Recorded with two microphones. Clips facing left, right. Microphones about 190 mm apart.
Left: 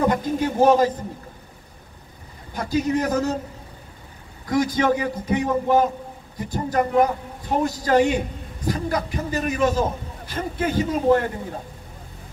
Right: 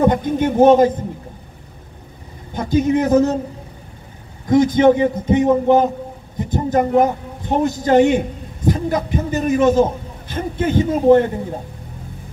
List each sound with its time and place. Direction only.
0.0 s a man's voice: 25° right (ahead or behind)
2.5 s a man's voice: 25° right (ahead or behind)
4.5 s a man's voice: 20° right (ahead or behind)